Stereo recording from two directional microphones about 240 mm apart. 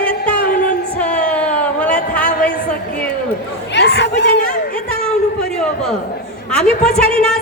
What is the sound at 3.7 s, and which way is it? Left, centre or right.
Chatter, left.